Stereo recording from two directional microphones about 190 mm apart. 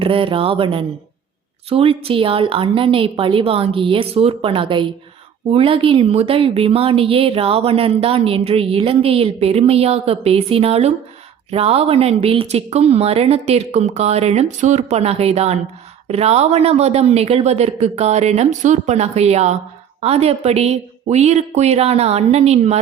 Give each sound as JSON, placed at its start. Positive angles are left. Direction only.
{"t": 0.0, "sound": "a woman's voice", "side_deg": -30}